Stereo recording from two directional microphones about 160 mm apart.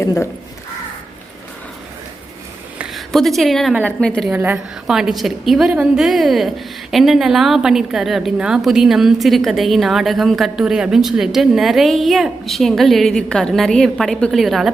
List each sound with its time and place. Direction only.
0.0 s speech: 20° left (ahead or behind)
2.7 s a woman's voice: centre (ahead or behind)
4.3 s a woman's voice: 10° right (ahead or behind)